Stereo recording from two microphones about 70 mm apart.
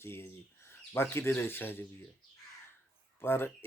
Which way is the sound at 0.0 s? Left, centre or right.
Left.